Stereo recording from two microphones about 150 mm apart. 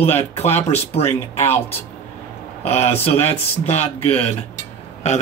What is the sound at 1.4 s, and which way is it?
Speech, 15° left (ahead or behind).